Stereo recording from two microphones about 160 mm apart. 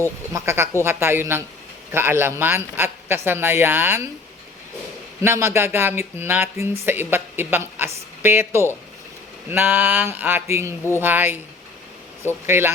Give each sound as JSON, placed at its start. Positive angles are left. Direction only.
{"t": 0.3, "sound": "speech", "side_deg": -15}
{"t": 5.2, "sound": "speech", "side_deg": -15}
{"t": 12.5, "sound": "speech", "side_deg": -15}